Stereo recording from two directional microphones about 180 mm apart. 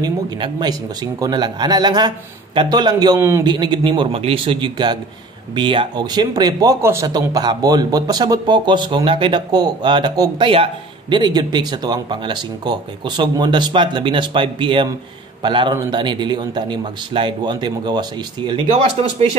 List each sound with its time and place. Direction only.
0.0 s speech: 25° right (ahead or behind)
3.4 s speech: 25° right (ahead or behind)